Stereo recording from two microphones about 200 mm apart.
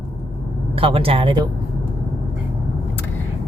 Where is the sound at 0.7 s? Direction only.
25° right (ahead or behind).